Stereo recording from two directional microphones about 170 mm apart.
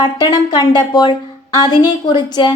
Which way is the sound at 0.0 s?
25° left (ahead or behind).